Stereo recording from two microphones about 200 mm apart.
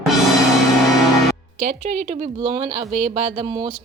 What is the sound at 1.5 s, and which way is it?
Speech, 30° right (ahead or behind).